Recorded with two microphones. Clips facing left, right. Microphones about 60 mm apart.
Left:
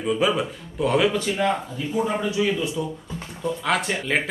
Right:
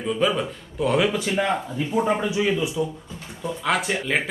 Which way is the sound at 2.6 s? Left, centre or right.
Centre.